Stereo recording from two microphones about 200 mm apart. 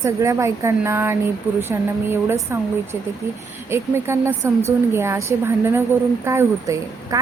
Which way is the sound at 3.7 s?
10° right (ahead or behind).